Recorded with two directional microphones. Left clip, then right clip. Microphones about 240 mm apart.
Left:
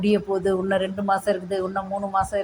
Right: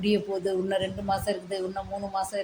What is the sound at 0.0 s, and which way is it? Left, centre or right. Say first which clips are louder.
A woman's voice: left 5 dB; centre.